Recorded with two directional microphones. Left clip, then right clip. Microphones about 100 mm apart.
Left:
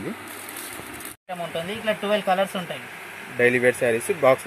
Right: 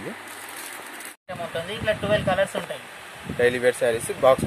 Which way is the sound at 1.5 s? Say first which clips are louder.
Right 1 dB; centre (ahead or behind).